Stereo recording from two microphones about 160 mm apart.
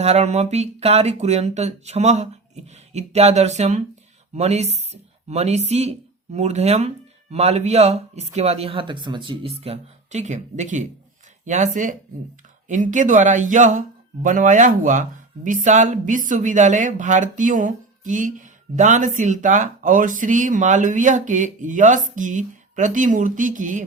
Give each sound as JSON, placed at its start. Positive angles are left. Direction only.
{"t": 0.0, "sound": "speech", "side_deg": -40}